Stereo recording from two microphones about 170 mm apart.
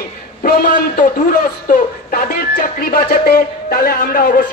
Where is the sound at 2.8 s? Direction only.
60° left (ahead or behind).